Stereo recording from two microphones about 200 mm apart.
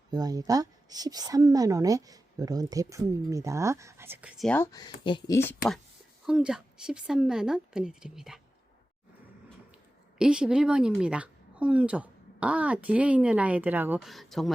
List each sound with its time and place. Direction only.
0.1 s a woman's voice: 20° right (ahead or behind); by 5.4 s 20° left (ahead or behind)
6.2 s a woman's voice: 5° right (ahead or behind)
10.2 s a woman's voice: 5° right (ahead or behind)